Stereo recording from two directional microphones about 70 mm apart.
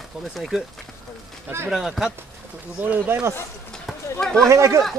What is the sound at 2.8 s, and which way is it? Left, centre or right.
Speech, right.